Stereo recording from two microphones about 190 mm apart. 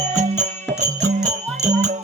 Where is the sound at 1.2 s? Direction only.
40° right (ahead or behind).